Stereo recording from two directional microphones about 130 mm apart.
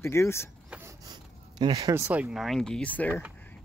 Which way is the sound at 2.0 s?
10° right (ahead or behind).